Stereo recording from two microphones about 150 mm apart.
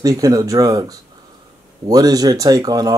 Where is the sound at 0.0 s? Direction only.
25° right (ahead or behind).